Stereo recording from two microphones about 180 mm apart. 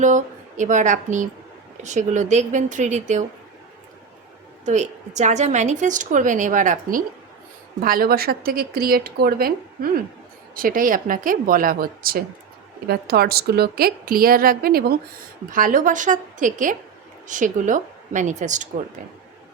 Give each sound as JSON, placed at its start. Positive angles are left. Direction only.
{"t": 0.0, "sound": "a woman's voice", "side_deg": -45}
{"t": 4.6, "sound": "a woman's voice", "side_deg": -40}